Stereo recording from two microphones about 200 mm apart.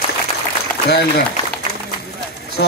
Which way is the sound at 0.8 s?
50° left (ahead or behind).